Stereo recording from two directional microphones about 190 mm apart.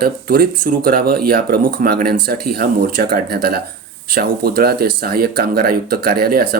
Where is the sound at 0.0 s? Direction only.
55° right (ahead or behind).